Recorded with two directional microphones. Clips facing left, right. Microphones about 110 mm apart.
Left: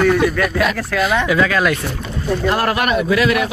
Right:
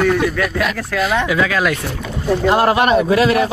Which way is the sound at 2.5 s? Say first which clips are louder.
Right 5 dB; 25° right (ahead or behind).